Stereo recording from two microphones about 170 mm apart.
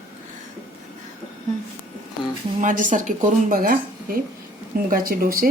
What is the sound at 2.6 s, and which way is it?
Speech, 50° right (ahead or behind).